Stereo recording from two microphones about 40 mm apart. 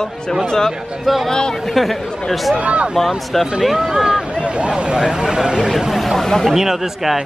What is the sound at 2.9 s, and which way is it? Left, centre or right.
Speech, centre.